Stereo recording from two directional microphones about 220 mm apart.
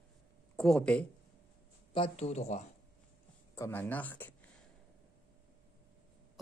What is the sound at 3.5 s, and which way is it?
Speech, 10° left (ahead or behind).